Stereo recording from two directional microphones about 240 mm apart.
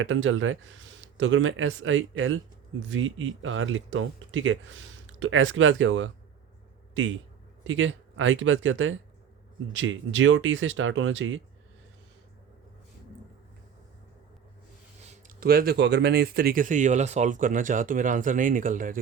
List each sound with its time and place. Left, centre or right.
0.0 s speech: right
7.6 s speech: right
15.1 s speech: right